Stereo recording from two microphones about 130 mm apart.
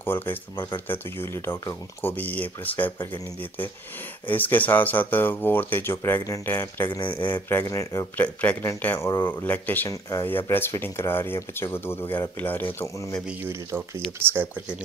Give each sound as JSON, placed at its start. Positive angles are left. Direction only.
{"t": 0.0, "sound": "speech", "side_deg": 15}
{"t": 4.3, "sound": "speech", "side_deg": 15}
{"t": 6.9, "sound": "speech", "side_deg": 35}
{"t": 7.4, "sound": "speech", "side_deg": 20}
{"t": 8.2, "sound": "speech", "side_deg": 10}
{"t": 13.4, "sound": "speech", "side_deg": -20}